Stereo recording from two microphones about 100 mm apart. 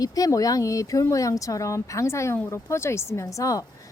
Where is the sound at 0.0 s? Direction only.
35° left (ahead or behind).